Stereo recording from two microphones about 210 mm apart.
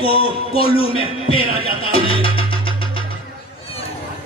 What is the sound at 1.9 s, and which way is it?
Music, 25° left (ahead or behind).